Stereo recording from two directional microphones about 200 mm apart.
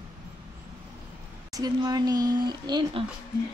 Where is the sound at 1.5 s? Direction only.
20° right (ahead or behind).